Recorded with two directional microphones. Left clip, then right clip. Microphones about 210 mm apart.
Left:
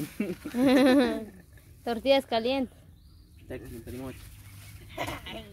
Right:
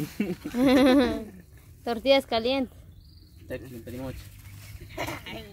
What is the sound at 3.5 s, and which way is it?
Speech, 35° right (ahead or behind).